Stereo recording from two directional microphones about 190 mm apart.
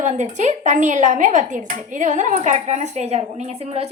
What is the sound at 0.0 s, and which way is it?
A woman's voice, 40° right (ahead or behind).